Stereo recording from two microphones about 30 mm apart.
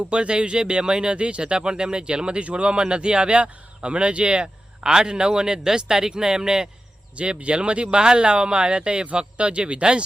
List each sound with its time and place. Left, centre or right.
0.0 s speech: right
1.1 s speech: right
2.4 s a man's voice: right
2.6 s speech: right
7.2 s speech: right